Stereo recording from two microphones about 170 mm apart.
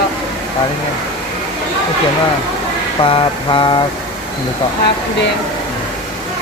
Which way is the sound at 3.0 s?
30° left (ahead or behind).